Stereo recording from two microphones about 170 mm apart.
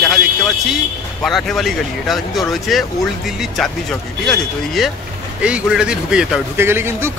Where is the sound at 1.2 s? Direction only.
Centre (ahead or behind).